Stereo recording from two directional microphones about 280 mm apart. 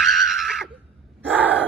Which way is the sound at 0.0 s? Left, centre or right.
Centre.